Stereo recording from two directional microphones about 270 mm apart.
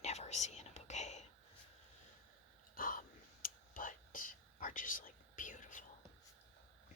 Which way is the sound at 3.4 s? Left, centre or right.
Left.